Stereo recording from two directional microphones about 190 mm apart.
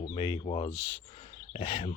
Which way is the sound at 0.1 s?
25° left (ahead or behind).